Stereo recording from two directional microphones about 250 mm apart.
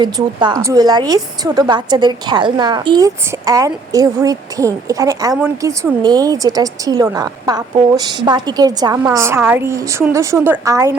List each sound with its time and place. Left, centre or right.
0.0 s a woman's voice: centre